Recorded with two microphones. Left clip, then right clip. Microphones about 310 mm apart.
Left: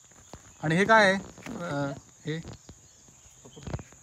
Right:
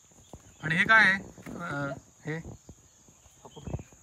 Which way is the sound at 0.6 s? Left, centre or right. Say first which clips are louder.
Even; centre.